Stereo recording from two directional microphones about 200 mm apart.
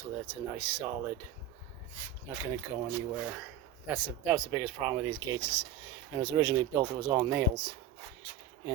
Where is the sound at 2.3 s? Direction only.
15° right (ahead or behind).